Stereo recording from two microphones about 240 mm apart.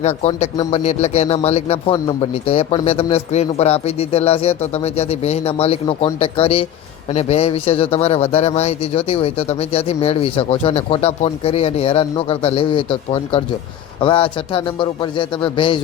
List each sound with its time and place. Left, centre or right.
0.0 s a man's voice: left